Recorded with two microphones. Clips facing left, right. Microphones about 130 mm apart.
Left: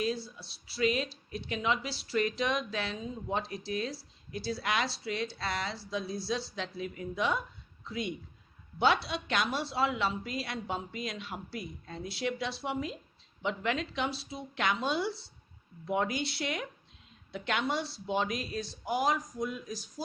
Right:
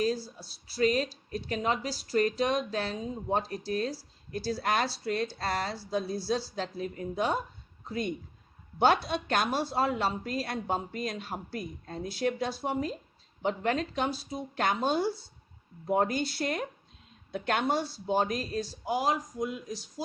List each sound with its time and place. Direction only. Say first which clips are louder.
0.0 s speech: right 3 dB; 40° right (ahead or behind); by 19.8 s 20° right (ahead or behind)